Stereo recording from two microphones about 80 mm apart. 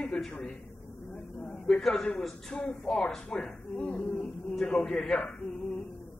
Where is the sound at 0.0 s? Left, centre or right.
Centre.